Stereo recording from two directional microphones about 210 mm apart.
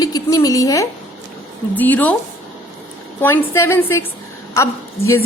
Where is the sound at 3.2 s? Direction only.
10° left (ahead or behind).